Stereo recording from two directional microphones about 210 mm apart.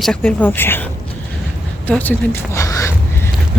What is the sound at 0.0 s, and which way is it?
Speech, 5° left (ahead or behind).